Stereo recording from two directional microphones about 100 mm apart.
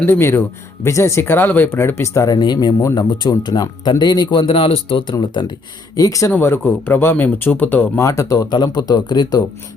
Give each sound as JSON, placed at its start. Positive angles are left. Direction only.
{"t": 0.0, "sound": "a man's voice", "side_deg": 25}
{"t": 4.4, "sound": "speech", "side_deg": 70}
{"t": 5.1, "sound": "a man's voice", "side_deg": 50}
{"t": 6.0, "sound": "speech", "side_deg": 35}
{"t": 6.3, "sound": "speech", "side_deg": 20}
{"t": 7.9, "sound": "speech", "side_deg": 30}